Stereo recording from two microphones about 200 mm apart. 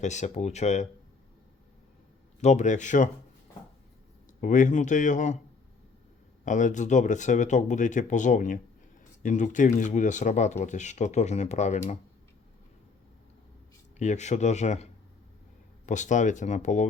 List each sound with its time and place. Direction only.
0.0 s speech: 35° left (ahead or behind)
2.4 s speech: 35° left (ahead or behind)
4.4 s speech: 40° left (ahead or behind)
6.4 s speech: 40° left (ahead or behind)
14.0 s speech: 35° left (ahead or behind)
15.9 s speech: 40° left (ahead or behind)